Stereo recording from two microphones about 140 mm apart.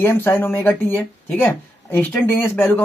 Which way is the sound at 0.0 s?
15° left (ahead or behind).